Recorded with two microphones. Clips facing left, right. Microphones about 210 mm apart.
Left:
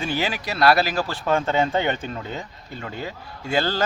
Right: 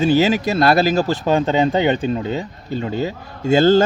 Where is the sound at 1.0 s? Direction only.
40° right (ahead or behind).